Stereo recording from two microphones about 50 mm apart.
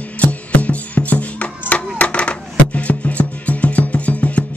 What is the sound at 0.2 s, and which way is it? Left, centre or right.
Music, left.